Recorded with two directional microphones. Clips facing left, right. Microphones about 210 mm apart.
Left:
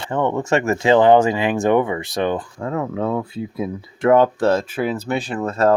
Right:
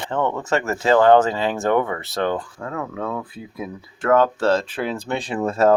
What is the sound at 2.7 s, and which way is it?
Speech, 25° left (ahead or behind).